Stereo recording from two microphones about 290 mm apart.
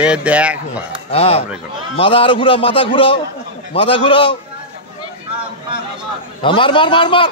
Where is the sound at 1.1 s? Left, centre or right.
Centre.